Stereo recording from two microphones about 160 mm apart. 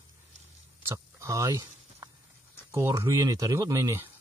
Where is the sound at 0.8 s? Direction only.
20° right (ahead or behind).